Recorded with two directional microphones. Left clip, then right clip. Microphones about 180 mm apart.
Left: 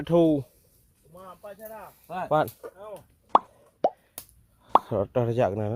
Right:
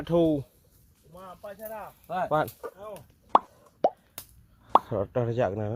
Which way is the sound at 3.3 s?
Centre (ahead or behind).